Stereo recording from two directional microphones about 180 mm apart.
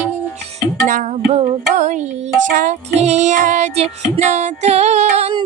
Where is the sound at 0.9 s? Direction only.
50° right (ahead or behind); by 5.5 s 30° right (ahead or behind).